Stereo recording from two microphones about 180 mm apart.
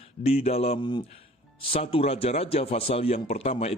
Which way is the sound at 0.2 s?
35° left (ahead or behind).